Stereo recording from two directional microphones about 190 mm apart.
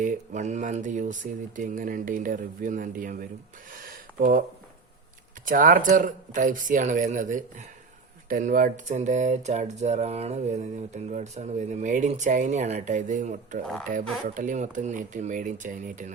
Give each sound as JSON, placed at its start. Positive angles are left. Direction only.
{"t": 0.0, "sound": "speech", "side_deg": -40}
{"t": 3.8, "sound": "a sound", "side_deg": -45}
{"t": 5.5, "sound": "speech", "side_deg": -45}